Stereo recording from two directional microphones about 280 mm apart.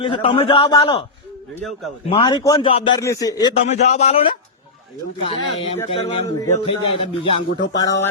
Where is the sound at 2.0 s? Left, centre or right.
Centre.